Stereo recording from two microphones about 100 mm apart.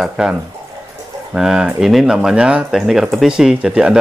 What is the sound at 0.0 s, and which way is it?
Speech, 5° right (ahead or behind).